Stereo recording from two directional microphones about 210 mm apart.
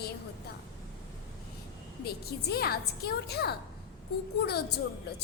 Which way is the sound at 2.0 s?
50° left (ahead or behind).